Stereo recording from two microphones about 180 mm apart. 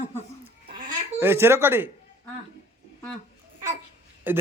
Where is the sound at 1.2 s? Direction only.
10° right (ahead or behind).